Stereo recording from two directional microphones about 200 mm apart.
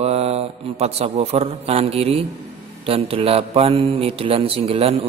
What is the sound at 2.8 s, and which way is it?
A man's voice, 30° right (ahead or behind).